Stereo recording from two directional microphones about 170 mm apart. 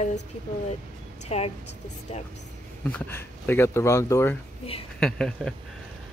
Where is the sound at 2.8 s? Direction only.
10° left (ahead or behind).